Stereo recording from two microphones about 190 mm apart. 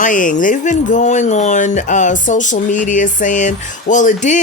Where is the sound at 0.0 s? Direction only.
45° left (ahead or behind).